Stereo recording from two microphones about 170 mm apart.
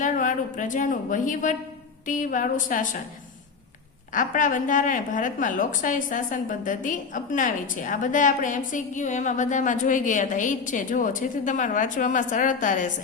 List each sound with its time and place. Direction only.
0.0 s a woman's voice: 50° left (ahead or behind)
4.1 s a woman's voice: 50° left (ahead or behind)